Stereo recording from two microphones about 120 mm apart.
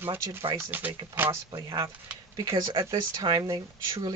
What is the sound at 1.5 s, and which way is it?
Speech, 40° right (ahead or behind).